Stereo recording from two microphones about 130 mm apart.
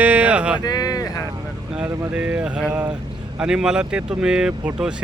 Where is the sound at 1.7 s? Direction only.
10° right (ahead or behind).